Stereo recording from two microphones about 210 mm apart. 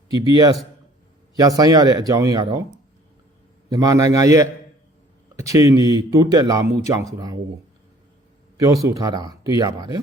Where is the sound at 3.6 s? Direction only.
15° right (ahead or behind).